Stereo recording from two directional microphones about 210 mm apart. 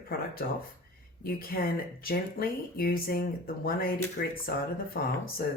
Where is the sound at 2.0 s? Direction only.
45° left (ahead or behind).